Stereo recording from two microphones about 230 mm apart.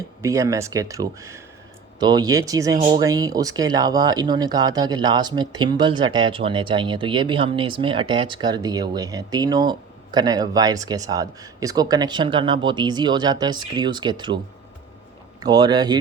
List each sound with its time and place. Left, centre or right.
0.2 s speech: centre
15.4 s speech: centre